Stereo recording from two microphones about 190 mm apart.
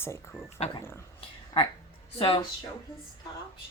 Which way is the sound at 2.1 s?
25° left (ahead or behind).